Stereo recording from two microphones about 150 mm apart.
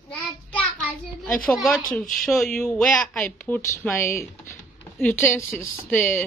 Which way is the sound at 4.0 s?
20° left (ahead or behind).